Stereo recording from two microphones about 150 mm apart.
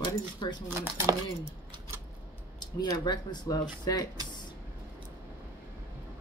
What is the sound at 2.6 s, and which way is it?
Speech, 30° left (ahead or behind).